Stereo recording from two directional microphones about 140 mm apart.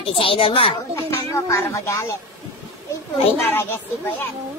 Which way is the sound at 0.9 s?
20° left (ahead or behind).